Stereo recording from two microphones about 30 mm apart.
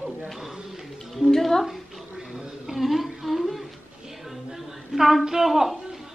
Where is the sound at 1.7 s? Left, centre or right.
Centre.